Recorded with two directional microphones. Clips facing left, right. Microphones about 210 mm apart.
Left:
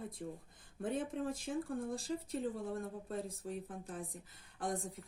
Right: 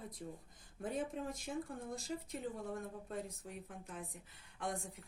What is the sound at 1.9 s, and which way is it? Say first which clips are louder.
Speech: left 4 dB; 35° left (ahead or behind).